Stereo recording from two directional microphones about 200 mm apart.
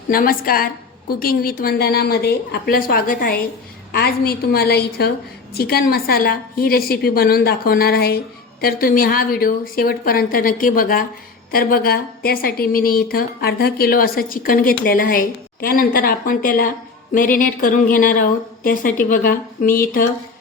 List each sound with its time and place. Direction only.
0.1 s a woman's voice: 45° left (ahead or behind)